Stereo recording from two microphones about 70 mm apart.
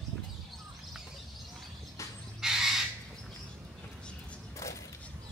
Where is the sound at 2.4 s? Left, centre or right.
Centre.